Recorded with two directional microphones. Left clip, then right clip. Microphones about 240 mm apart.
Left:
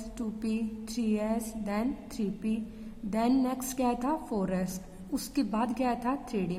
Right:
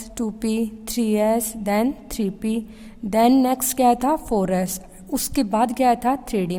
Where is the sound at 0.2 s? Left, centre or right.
Right.